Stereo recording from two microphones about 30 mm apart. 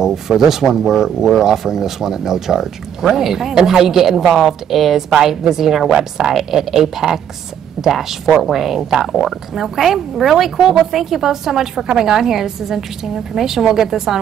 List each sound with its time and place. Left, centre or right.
0.0 s speech: centre